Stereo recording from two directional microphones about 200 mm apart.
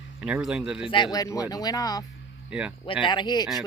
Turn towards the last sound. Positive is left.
turn(degrees=20)  # may be behind; listen again after turning